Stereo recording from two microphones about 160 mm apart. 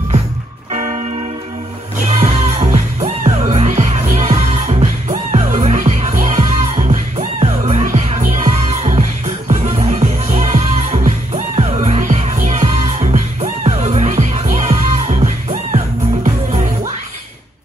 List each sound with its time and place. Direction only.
0.7 s music: 50° right (ahead or behind)
2.1 s music: 45° right (ahead or behind)